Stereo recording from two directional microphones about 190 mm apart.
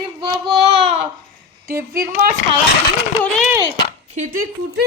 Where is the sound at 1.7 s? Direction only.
50° right (ahead or behind).